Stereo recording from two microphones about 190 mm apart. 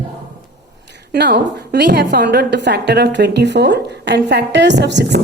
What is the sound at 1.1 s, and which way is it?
A woman's voice, 60° right (ahead or behind).